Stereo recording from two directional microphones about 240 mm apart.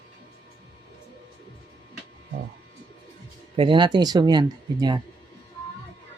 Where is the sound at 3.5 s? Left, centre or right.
Right.